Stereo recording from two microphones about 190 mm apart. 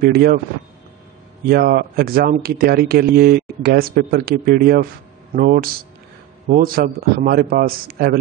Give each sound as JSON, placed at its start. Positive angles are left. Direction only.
{"t": 0.0, "sound": "speech", "side_deg": -55}
{"t": 1.5, "sound": "speech", "side_deg": -50}